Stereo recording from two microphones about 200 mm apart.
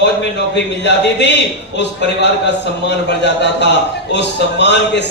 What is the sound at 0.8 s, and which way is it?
Speech, 60° left (ahead or behind).